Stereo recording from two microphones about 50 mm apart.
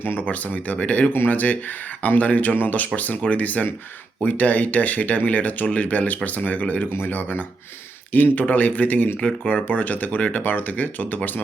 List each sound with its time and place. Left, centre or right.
0.0 s speech: left
0.3 s speech: left
9.6 s speech: left